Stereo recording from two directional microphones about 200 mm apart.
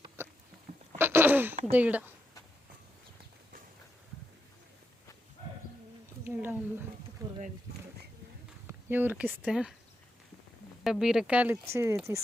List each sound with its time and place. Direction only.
0.2 s a sound: 10° right (ahead or behind)
1.7 s speech: 5° right (ahead or behind)
6.2 s speech: 10° right (ahead or behind)
7.2 s a sound: 15° right (ahead or behind)
8.6 s speech: 10° right (ahead or behind)
10.8 s speech: centre (ahead or behind)